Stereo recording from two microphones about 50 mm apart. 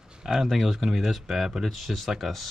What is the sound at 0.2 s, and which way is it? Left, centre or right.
Speech, centre.